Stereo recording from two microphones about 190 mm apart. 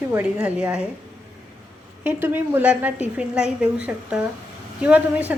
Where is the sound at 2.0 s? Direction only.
10° right (ahead or behind).